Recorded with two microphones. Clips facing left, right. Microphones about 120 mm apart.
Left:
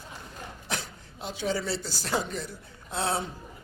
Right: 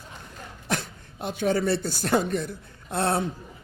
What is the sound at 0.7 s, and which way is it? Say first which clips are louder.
Speech: right 7 dB; 55° right (ahead or behind).